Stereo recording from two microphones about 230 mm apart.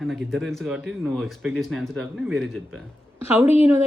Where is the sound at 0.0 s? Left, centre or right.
Centre.